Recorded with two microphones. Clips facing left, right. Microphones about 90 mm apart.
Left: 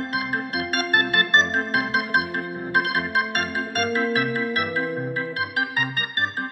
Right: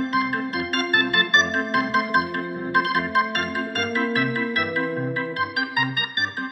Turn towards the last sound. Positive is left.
turn(degrees=20)  # may be behind; listen again after turning